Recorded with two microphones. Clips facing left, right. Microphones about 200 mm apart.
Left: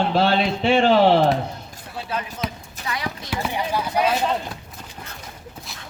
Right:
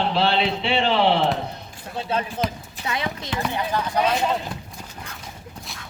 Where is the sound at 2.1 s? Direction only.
25° right (ahead or behind).